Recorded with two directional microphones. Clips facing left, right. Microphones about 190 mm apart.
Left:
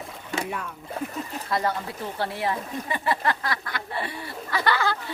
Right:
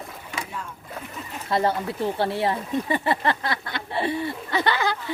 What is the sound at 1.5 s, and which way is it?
Speech, 25° right (ahead or behind).